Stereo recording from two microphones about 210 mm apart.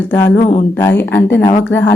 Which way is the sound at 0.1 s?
10° left (ahead or behind).